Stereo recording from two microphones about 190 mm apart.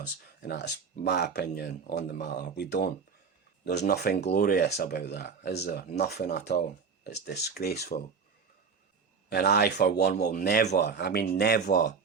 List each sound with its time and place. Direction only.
0.4 s speech: 60° left (ahead or behind)
9.3 s speech: 55° left (ahead or behind)